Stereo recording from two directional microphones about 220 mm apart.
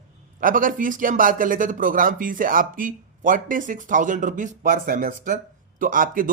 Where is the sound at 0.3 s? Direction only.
40° right (ahead or behind).